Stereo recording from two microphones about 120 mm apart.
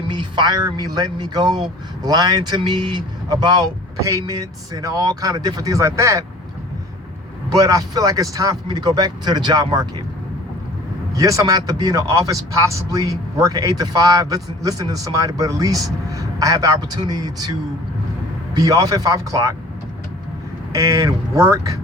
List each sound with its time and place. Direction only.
0.1 s speech: 40° right (ahead or behind)
7.5 s speech: 30° right (ahead or behind)
11.1 s speech: 30° right (ahead or behind)
18.5 s speech: 30° right (ahead or behind)
20.7 s speech: 25° right (ahead or behind)